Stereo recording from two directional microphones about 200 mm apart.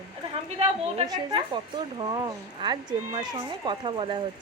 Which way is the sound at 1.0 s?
20° right (ahead or behind).